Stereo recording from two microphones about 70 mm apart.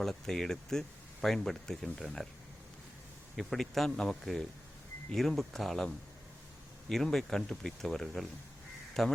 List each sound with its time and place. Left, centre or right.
0.0 s speech: centre
3.3 s speech: centre